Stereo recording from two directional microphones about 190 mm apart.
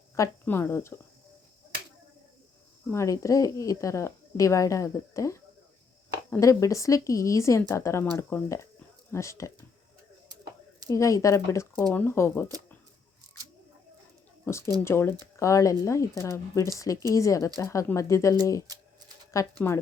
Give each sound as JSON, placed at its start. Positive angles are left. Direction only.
{"t": 0.2, "sound": "speech", "side_deg": 10}
{"t": 2.9, "sound": "speech", "side_deg": 15}
{"t": 10.8, "sound": "speech", "side_deg": 15}
{"t": 14.4, "sound": "speech", "side_deg": 15}
{"t": 18.7, "sound": "a sound", "side_deg": -20}
{"t": 19.3, "sound": "speech", "side_deg": 15}